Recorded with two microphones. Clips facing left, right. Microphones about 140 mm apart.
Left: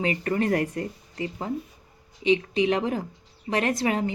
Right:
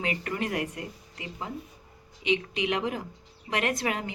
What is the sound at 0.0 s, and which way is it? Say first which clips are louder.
A woman's voice: left 6 dB; 35° left (ahead or behind).